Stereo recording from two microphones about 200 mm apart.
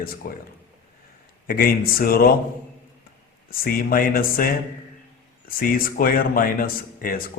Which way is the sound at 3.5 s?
45° left (ahead or behind).